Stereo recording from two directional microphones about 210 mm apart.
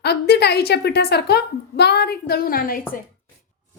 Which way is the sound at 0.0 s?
50° left (ahead or behind).